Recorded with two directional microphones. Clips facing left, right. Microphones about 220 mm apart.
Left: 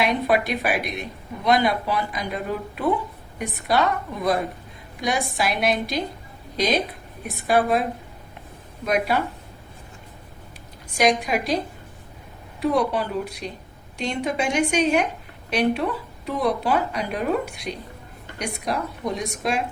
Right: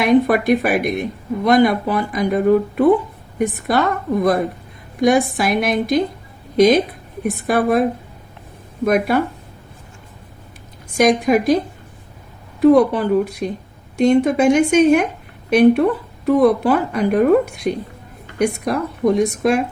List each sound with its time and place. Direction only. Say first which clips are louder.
0.0 s speech: right 7 dB; 50° right (ahead or behind)
10.9 s speech: right 7 dB; 50° right (ahead or behind)
12.7 s speech: right 9 dB; 50° right (ahead or behind)